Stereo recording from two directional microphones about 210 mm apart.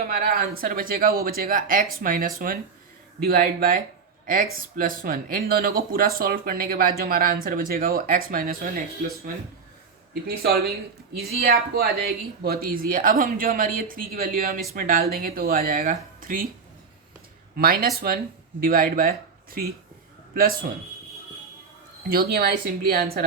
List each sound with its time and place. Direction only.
0.1 s speech: 45° right (ahead or behind)
4.8 s speech: 40° right (ahead or behind)
10.2 s speech: 45° right (ahead or behind)
17.6 s speech: 45° right (ahead or behind)
22.1 s speech: 45° right (ahead or behind)